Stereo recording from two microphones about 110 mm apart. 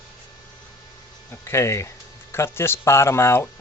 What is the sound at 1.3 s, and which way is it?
Speech, 25° left (ahead or behind).